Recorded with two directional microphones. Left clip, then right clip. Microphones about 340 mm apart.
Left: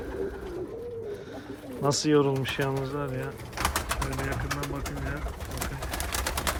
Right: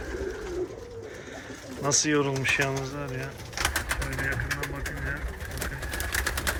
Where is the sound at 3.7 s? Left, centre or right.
Centre.